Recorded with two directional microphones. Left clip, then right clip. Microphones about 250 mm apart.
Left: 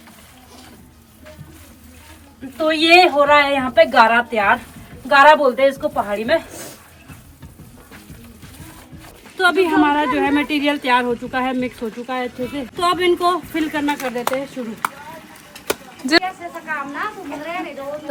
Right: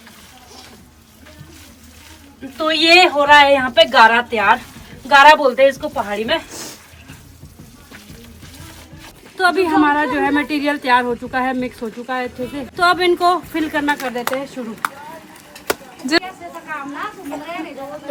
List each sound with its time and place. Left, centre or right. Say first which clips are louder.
2.6 s a woman's voice: right 1 dB; centre
9.4 s a woman's voice: right 1 dB; centre
16.0 s a woman's voice: left 2 dB; centre